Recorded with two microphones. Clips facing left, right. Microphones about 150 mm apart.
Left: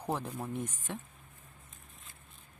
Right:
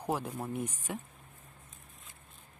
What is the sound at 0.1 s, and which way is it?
Speech, 5° right (ahead or behind).